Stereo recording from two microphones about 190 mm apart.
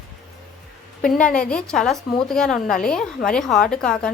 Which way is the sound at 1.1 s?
5° left (ahead or behind).